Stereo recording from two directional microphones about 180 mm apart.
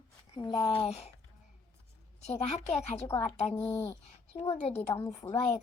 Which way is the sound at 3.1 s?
10° left (ahead or behind).